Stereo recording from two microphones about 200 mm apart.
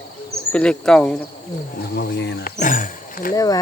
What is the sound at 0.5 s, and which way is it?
Speech, 5° left (ahead or behind).